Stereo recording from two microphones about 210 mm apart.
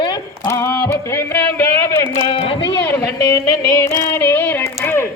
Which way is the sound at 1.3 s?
10° left (ahead or behind).